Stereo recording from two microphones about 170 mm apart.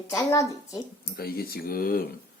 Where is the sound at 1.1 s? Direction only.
65° left (ahead or behind).